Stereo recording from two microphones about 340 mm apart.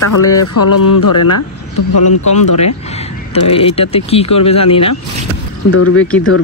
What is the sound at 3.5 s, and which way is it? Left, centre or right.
Speech, centre.